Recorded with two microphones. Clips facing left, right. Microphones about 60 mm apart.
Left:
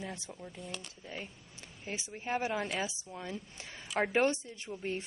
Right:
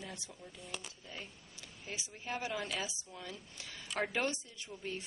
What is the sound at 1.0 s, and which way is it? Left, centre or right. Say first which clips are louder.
A woman's voice: left 4 dB; left.